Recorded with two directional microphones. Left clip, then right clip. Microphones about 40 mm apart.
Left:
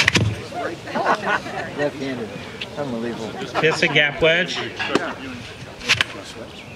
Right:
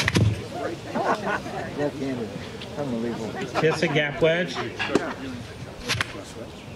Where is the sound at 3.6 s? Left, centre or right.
Left.